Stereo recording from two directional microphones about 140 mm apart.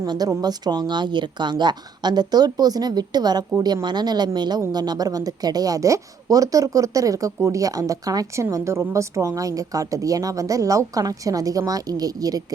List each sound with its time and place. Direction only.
0.0 s speech: 25° right (ahead or behind)